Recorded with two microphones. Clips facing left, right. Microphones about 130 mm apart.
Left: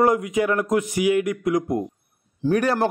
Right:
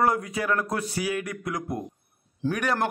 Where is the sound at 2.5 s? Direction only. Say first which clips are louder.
Left 6 dB; 35° left (ahead or behind).